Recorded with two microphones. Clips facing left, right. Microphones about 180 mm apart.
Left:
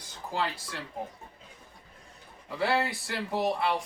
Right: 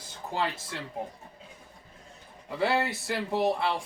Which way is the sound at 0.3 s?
25° right (ahead or behind).